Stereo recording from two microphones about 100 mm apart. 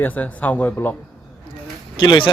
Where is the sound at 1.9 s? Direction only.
50° left (ahead or behind).